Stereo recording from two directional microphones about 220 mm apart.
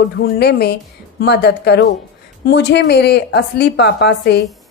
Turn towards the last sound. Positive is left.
turn(degrees=50)  # may be behind; listen again after turning